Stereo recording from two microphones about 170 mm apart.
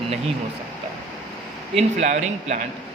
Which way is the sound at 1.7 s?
45° right (ahead or behind).